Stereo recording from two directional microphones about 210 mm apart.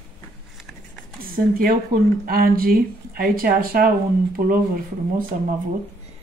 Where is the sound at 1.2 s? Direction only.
45° right (ahead or behind).